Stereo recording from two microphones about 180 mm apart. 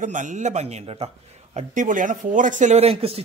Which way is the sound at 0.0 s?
45° right (ahead or behind).